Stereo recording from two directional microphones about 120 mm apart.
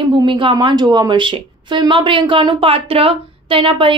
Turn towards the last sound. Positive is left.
turn(degrees=-45)  # may be behind; listen again after turning